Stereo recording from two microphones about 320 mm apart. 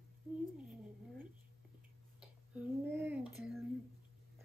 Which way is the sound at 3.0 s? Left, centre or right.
Centre.